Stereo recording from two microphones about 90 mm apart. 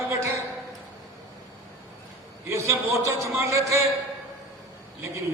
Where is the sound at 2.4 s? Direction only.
30° right (ahead or behind).